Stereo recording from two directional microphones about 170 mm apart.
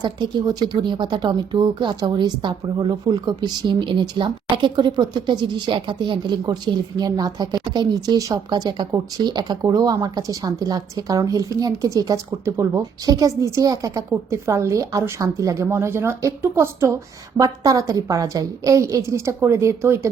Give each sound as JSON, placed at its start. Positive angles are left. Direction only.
{"t": 0.0, "sound": "speech", "side_deg": -25}